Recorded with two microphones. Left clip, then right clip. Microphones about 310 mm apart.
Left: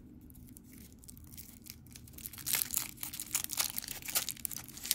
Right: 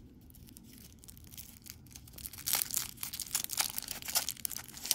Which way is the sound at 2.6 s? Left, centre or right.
Centre.